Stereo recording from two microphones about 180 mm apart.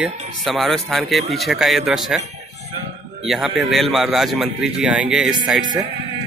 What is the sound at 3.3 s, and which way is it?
A man's voice, centre (ahead or behind).